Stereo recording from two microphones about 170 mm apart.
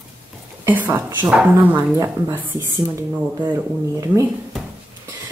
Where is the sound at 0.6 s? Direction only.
10° right (ahead or behind).